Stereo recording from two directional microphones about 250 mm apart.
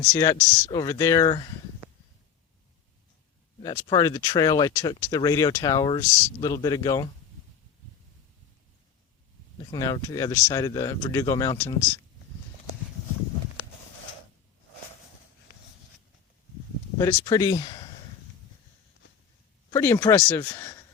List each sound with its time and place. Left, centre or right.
0.0 s speech: centre
3.6 s speech: centre
9.7 s speech: centre
17.0 s speech: centre
19.7 s speech: centre